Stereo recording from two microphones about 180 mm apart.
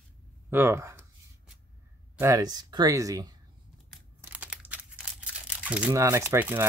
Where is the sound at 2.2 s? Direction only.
20° right (ahead or behind).